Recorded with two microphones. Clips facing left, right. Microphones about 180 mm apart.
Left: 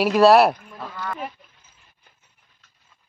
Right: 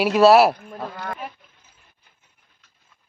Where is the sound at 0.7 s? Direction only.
50° right (ahead or behind).